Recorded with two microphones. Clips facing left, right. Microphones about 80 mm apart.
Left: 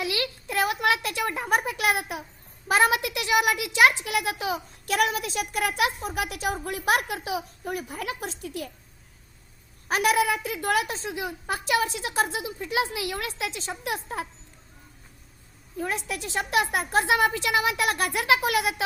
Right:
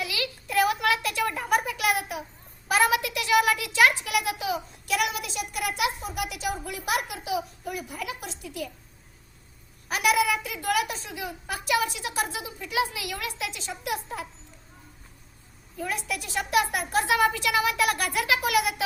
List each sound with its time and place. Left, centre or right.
0.0 s a sound: left
2.6 s speech: left
4.0 s a child's voice: left
9.9 s a woman's voice: left
15.8 s speech: left